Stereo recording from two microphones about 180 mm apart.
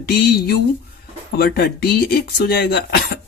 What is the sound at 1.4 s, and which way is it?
Speech, 60° left (ahead or behind).